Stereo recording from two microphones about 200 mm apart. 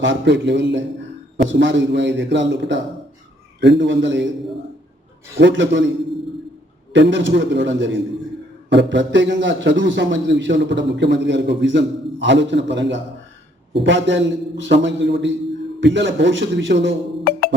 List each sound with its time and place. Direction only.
0.0 s a man's voice: 65° right (ahead or behind)
5.4 s a man's voice: 65° right (ahead or behind)
6.9 s a man's voice: 60° right (ahead or behind)